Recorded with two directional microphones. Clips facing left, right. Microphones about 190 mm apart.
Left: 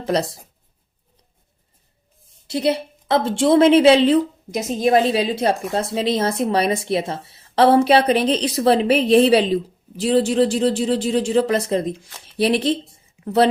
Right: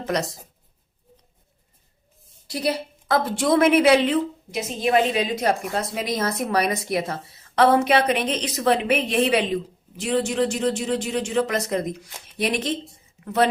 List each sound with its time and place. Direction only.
0.0 s speech: 30° left (ahead or behind)
2.5 s a woman's voice: 25° left (ahead or behind)